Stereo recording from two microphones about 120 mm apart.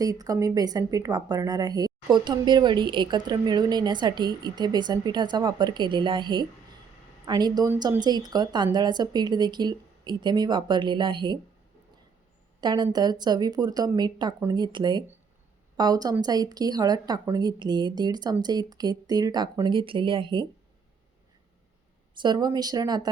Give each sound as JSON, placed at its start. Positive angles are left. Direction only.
{"t": 0.0, "sound": "speech", "side_deg": -30}
{"t": 12.5, "sound": "speech", "side_deg": -35}
{"t": 22.2, "sound": "speech", "side_deg": -35}